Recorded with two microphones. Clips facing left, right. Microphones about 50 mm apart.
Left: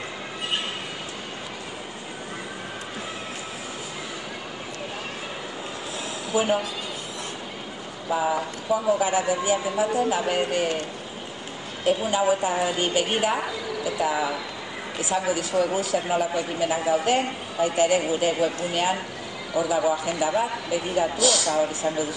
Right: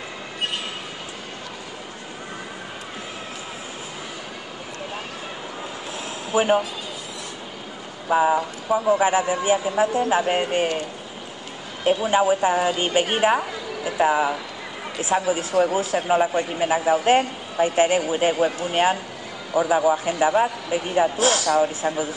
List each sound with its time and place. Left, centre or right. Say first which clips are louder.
6.3 s a man's voice: right 4 dB; right
8.1 s a man's voice: right 5 dB; right
9.0 s a man's voice: right 3 dB; right
11.8 s a man's voice: right 3 dB; right